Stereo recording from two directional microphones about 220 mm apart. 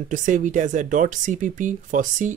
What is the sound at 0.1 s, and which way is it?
Speech, 35° right (ahead or behind).